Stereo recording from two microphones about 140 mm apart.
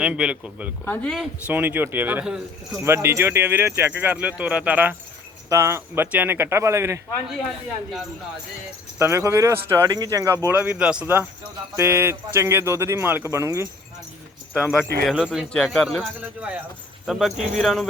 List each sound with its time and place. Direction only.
0.0 s speech: 5° right (ahead or behind)
0.9 s speech: 5° left (ahead or behind)
1.5 s speech: 15° right (ahead or behind)
9.0 s speech: 20° right (ahead or behind)
10.5 s speech: 10° right (ahead or behind)
14.5 s speech: 5° right (ahead or behind)
16.2 s speech: 10° right (ahead or behind)